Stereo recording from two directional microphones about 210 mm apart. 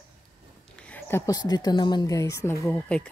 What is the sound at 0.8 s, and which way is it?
Speech, 5° left (ahead or behind).